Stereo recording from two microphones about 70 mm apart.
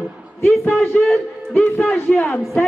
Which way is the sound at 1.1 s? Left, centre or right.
Centre.